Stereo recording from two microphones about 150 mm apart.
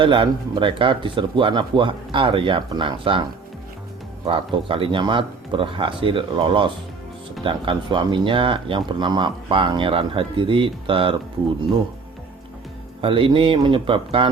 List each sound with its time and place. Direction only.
0.0 s speech: 30° right (ahead or behind)
4.3 s speech: 35° right (ahead or behind)
13.0 s speech: 35° right (ahead or behind)